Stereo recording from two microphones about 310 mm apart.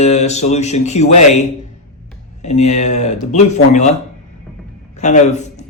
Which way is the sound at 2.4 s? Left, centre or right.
Left.